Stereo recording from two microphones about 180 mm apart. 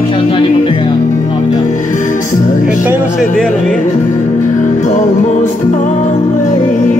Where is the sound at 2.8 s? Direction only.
10° right (ahead or behind).